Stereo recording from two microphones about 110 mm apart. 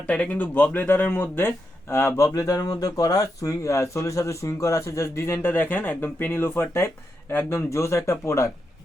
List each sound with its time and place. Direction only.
0.1 s speech: 10° left (ahead or behind); by 8.4 s 25° left (ahead or behind)